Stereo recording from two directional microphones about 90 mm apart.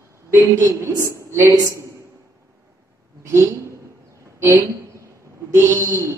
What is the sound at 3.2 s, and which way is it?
Speech, 35° right (ahead or behind).